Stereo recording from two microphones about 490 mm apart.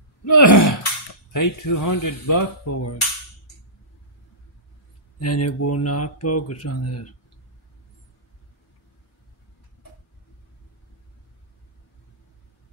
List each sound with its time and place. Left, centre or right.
0.2 s speech: left
5.2 s speech: left